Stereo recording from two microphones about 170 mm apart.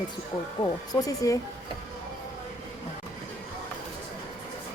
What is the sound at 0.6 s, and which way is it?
Speech, 20° left (ahead or behind).